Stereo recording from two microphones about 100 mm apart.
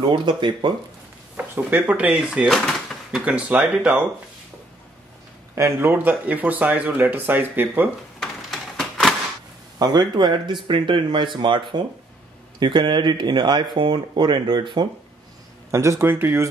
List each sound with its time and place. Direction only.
0.1 s speech: 55° right (ahead or behind)
1.3 s speech: 20° right (ahead or behind)
2.5 s drawer open or close: 5° left (ahead or behind)
3.2 s speech: 15° right (ahead or behind)
5.5 s speech: 30° right (ahead or behind)
8.2 s a sound: 5° left (ahead or behind)
9.8 s speech: 45° right (ahead or behind)
15.7 s speech: 30° right (ahead or behind)